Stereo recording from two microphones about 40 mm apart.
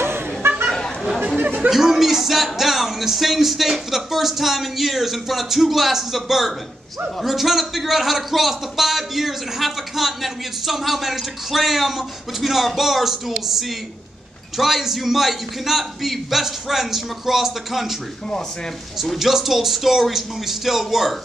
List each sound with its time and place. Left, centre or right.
0.0 s a sound: right
1.2 s chatter: right
1.7 s a man's voice: centre
19.1 s speech: centre